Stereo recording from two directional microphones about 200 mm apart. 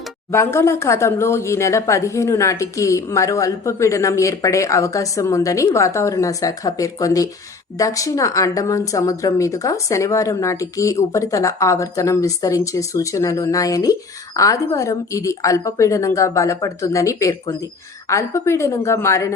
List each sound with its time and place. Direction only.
0.3 s speech: 15° left (ahead or behind)